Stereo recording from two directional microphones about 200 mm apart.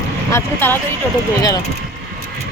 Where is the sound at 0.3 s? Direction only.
10° left (ahead or behind).